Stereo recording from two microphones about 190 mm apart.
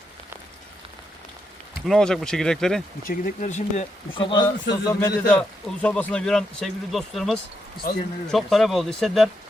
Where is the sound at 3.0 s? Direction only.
45° left (ahead or behind).